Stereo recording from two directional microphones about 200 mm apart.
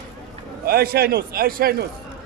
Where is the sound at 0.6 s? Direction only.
50° right (ahead or behind).